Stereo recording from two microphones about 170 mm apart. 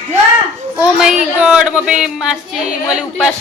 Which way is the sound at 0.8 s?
5° right (ahead or behind).